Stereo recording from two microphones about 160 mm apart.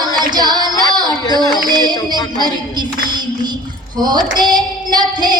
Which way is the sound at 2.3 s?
25° right (ahead or behind).